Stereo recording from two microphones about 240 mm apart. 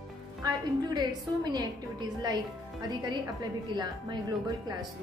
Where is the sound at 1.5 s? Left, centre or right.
Centre.